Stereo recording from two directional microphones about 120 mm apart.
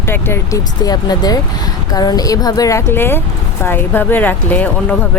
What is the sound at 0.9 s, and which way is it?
Speech, 35° left (ahead or behind).